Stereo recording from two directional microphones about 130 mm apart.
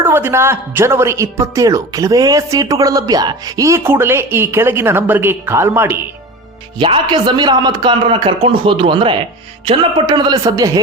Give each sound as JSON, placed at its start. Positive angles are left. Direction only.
{"t": 0.0, "sound": "a woman's voice", "side_deg": -20}
{"t": 6.7, "sound": "a man's voice", "side_deg": -40}